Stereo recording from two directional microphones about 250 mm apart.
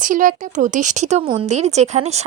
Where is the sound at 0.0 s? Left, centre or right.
Right.